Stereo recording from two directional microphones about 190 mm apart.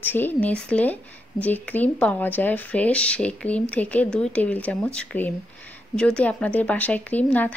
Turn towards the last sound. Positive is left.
turn(degrees=10)  # may be behind; listen again after turning